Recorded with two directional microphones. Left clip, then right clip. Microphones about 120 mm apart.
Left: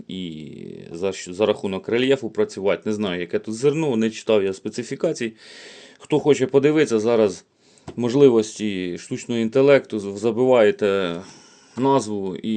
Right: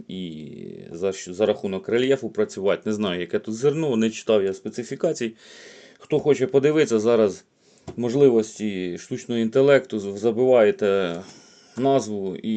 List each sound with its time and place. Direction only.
0.1 s speech: 20° left (ahead or behind)
4.4 s speech: 35° left (ahead or behind); by 5.3 s 20° left (ahead or behind)
6.1 s speech: 35° left (ahead or behind); by 7.3 s 15° left (ahead or behind)
7.9 s speech: 35° left (ahead or behind)